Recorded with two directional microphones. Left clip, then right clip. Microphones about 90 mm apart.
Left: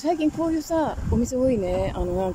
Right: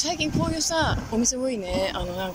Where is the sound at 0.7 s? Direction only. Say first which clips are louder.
Even; 85° left.